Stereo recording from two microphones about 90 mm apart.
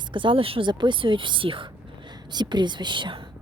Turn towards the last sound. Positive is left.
turn(degrees=-60)  # may be behind; listen again after turning